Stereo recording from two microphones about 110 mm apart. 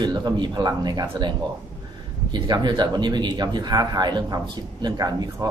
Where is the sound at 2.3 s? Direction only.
40° right (ahead or behind).